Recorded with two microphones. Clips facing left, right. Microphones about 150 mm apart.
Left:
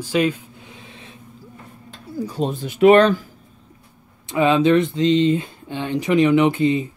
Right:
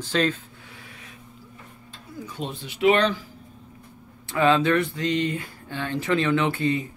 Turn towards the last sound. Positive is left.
turn(degrees=20)  # may be behind; listen again after turning